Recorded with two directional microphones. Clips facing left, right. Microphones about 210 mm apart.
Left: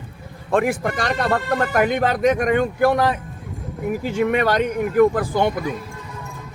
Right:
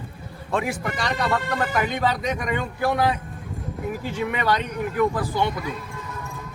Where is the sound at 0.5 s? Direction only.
50° left (ahead or behind).